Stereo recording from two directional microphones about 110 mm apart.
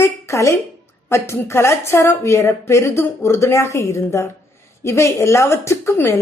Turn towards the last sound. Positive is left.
turn(degrees=25)  # may be behind; listen again after turning